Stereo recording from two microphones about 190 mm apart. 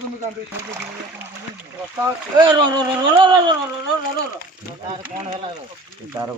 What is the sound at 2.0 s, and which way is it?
Speech, 20° right (ahead or behind).